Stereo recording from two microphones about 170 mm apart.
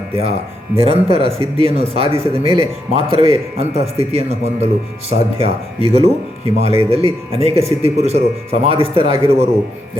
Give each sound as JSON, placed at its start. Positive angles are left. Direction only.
{"t": 0.1, "sound": "a man's voice", "side_deg": -35}